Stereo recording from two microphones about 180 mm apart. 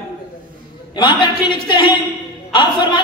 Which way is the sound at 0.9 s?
25° left (ahead or behind).